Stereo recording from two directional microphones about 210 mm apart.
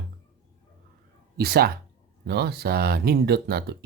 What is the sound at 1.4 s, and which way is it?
Speech, 50° right (ahead or behind).